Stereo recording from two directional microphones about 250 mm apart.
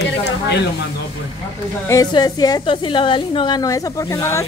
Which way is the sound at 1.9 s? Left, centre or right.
Centre.